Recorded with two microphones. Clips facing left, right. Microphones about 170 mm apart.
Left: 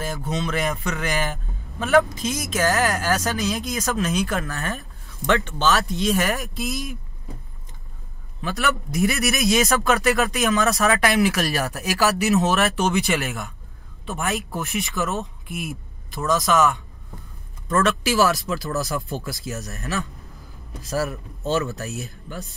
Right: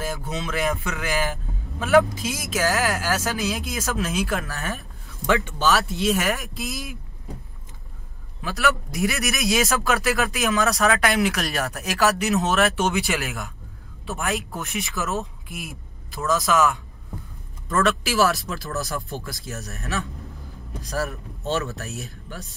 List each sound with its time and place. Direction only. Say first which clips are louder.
0.0 s a man's voice: left 2 dB; 5° right (ahead or behind)
8.4 s a man's voice: right 1 dB; centre (ahead or behind)